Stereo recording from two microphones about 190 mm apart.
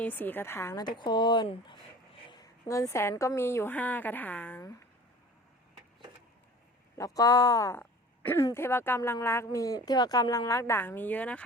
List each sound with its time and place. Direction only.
0.0 s a woman's voice: 10° left (ahead or behind)
6.9 s speech: 15° left (ahead or behind)